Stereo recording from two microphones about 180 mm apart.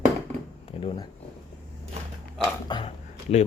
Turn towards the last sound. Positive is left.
turn(degrees=35)  # may be behind; listen again after turning